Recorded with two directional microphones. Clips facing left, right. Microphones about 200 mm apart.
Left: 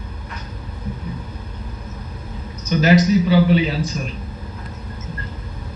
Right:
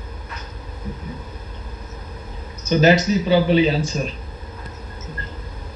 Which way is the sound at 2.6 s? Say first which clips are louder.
Even; 25° right (ahead or behind).